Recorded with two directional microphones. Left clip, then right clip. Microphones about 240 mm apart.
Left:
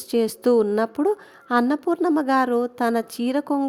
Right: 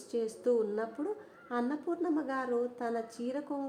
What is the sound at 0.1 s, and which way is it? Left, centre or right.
A woman's voice, left.